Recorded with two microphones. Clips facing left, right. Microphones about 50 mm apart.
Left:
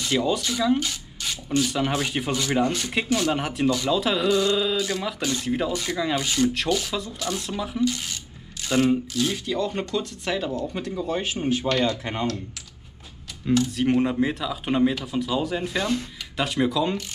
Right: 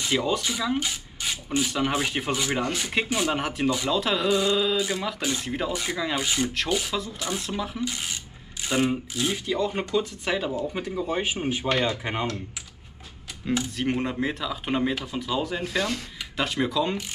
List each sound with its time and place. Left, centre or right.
0.0 s speech: centre
4.3 s speech: centre
7.8 s speech: centre
13.7 s speech: centre
15.6 s speech: centre
16.3 s speech: centre